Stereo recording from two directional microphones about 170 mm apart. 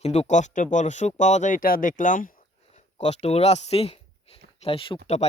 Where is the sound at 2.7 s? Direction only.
40° left (ahead or behind).